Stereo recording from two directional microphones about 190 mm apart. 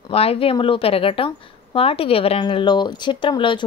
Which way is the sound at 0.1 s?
30° left (ahead or behind).